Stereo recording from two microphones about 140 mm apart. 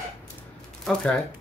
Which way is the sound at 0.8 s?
5° left (ahead or behind).